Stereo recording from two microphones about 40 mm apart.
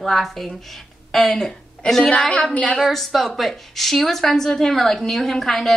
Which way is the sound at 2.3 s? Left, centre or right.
Left.